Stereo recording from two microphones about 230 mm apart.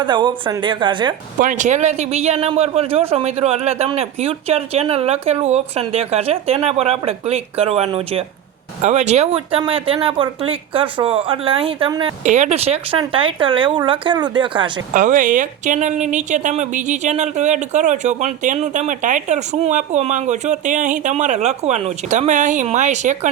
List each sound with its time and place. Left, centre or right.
0.0 s speech: centre
1.4 s speech: right
14.9 s a woman's voice: right